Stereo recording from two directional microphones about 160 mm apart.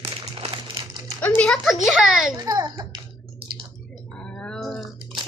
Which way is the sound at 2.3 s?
25° right (ahead or behind).